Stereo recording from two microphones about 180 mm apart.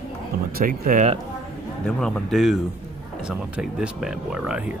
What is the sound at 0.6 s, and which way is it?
Speech, 50° right (ahead or behind).